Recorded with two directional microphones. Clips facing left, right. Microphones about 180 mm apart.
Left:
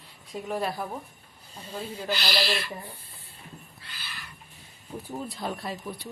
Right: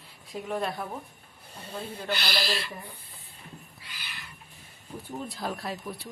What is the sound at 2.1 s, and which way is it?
Speech, 55° right (ahead or behind).